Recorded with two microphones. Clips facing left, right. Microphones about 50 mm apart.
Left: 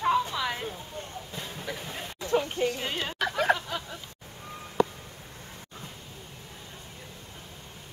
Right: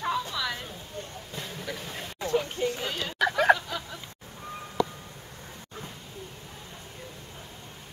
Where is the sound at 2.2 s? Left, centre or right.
Left.